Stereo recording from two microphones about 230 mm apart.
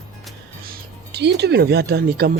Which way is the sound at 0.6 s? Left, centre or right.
Right.